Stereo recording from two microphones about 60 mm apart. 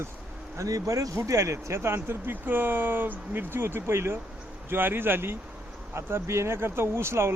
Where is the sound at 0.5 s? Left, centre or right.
Right.